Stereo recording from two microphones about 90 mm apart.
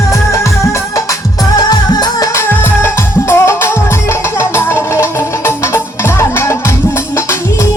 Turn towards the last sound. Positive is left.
turn(degrees=30)  # may be behind; listen again after turning